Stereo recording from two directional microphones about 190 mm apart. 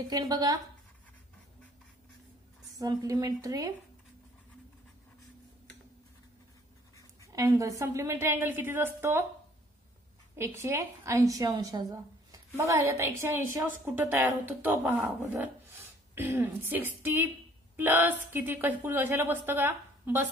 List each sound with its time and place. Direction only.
0.1 s a woman's voice: 20° right (ahead or behind)
2.8 s a woman's voice: 20° right (ahead or behind)
7.3 s a woman's voice: 15° right (ahead or behind)
10.3 s a woman's voice: 15° right (ahead or behind)